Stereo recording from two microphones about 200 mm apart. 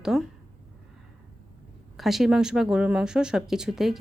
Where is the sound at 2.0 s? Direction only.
Centre (ahead or behind).